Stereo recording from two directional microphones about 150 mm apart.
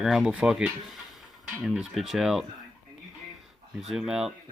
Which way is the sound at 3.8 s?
Centre (ahead or behind).